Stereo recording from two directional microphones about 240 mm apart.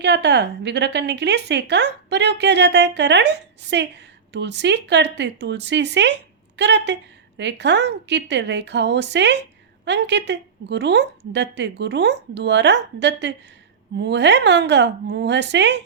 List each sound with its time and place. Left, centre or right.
0.0 s speech: right